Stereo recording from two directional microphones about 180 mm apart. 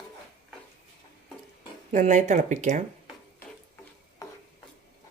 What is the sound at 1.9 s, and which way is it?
Speech, 45° right (ahead or behind).